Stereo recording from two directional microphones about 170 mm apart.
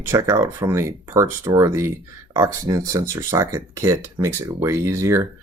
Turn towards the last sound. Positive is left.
turn(degrees=-15)  # may be behind; listen again after turning